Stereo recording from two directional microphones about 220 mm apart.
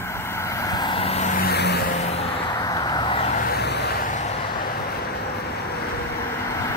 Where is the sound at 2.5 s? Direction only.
15° left (ahead or behind); by 4.3 s 35° left (ahead or behind).